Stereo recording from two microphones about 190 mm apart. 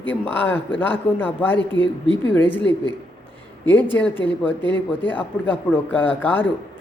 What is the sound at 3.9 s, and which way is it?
A man's voice, 5° left (ahead or behind).